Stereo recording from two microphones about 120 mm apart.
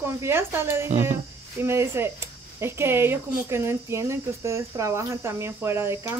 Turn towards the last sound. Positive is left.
turn(degrees=-20)  # may be behind; listen again after turning